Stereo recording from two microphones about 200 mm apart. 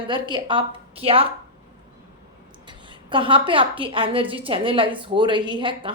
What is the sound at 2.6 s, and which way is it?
A woman's voice, 25° right (ahead or behind).